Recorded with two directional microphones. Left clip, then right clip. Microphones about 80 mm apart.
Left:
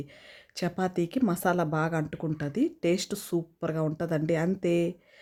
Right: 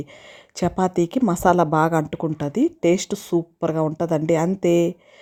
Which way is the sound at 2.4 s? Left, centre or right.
Right.